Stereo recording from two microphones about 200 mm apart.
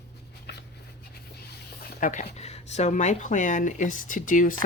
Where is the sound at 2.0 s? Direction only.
40° left (ahead or behind).